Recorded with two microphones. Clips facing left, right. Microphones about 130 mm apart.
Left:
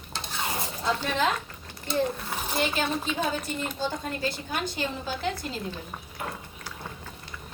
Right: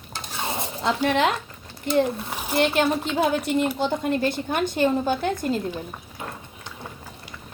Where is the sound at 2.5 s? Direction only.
65° right (ahead or behind).